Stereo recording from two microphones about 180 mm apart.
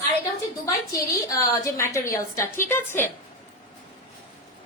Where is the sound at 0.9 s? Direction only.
20° left (ahead or behind).